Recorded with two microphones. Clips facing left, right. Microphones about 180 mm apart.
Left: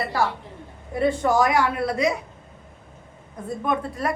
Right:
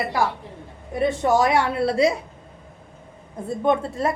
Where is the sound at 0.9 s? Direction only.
25° right (ahead or behind).